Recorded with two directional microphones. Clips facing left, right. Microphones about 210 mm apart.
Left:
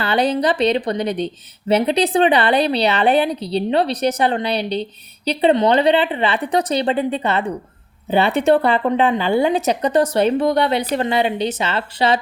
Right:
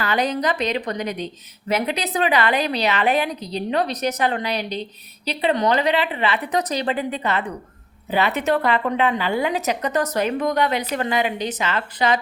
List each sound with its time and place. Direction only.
0.0 s a woman's voice: 30° left (ahead or behind)